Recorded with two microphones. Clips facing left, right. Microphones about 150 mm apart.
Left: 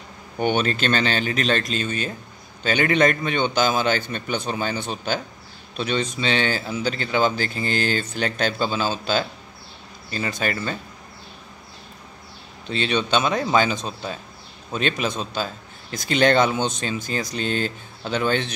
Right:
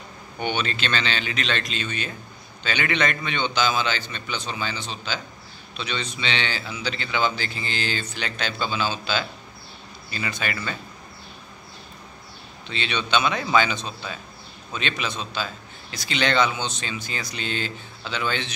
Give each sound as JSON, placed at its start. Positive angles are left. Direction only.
{"t": 0.4, "sound": "a man's voice", "side_deg": 45}
{"t": 12.6, "sound": "a man's voice", "side_deg": 40}